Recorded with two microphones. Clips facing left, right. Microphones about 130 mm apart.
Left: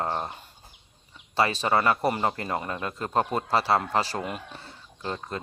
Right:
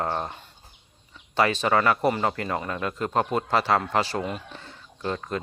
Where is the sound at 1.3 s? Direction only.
35° left (ahead or behind).